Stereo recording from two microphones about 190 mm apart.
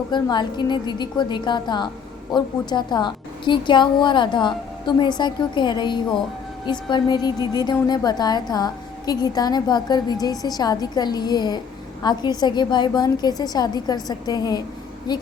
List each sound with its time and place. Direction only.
0.1 s a woman's voice: 25° left (ahead or behind)